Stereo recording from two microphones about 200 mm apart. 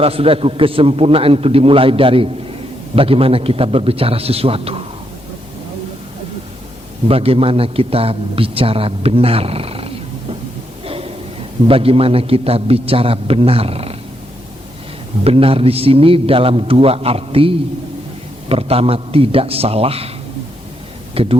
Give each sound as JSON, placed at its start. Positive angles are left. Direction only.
{"t": 0.0, "sound": "a man's voice", "side_deg": -30}
{"t": 7.1, "sound": "a man's voice", "side_deg": -30}
{"t": 10.8, "sound": "a sound", "side_deg": -30}
{"t": 11.7, "sound": "a man's voice", "side_deg": -30}
{"t": 15.2, "sound": "a man's voice", "side_deg": -30}
{"t": 21.2, "sound": "a man's voice", "side_deg": -30}